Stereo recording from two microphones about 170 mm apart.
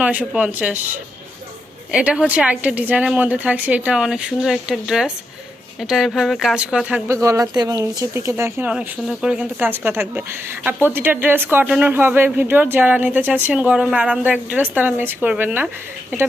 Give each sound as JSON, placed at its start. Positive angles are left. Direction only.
{"t": 0.0, "sound": "speech", "side_deg": -10}
{"t": 1.9, "sound": "speech", "side_deg": -5}
{"t": 7.2, "sound": "speech", "side_deg": -20}